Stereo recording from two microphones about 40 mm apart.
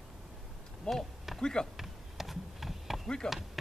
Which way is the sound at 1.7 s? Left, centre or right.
Centre.